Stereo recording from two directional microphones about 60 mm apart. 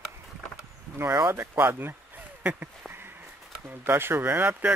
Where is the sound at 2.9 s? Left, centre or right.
Right.